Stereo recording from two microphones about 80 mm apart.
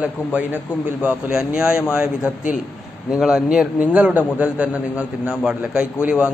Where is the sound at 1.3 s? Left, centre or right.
Centre.